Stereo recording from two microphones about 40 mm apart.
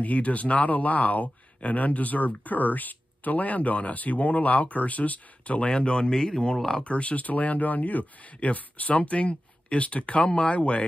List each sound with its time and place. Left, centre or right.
0.0 s speech: left
5.7 s speech: left
6.8 s speech: left